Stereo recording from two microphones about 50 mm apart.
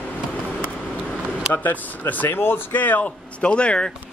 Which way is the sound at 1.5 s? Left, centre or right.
Left.